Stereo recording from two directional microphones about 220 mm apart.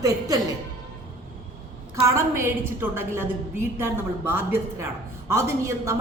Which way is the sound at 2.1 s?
10° right (ahead or behind).